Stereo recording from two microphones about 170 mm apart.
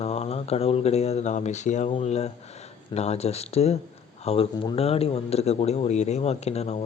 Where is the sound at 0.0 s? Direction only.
40° left (ahead or behind).